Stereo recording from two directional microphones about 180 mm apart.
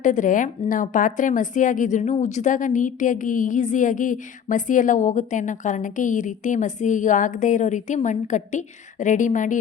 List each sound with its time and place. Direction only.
0.0 s a woman's voice: 45° left (ahead or behind)